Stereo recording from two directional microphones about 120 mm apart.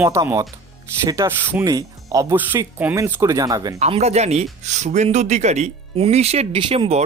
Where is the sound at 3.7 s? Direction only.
65° right (ahead or behind).